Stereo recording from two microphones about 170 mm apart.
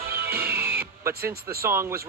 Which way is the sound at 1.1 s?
65° right (ahead or behind).